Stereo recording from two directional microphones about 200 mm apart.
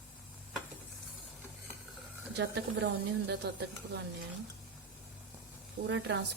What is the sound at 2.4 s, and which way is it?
Speech, 60° right (ahead or behind).